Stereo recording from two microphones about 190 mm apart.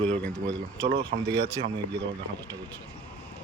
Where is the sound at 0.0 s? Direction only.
5° left (ahead or behind).